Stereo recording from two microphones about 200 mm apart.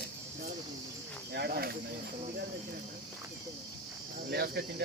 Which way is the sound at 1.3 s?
55° right (ahead or behind).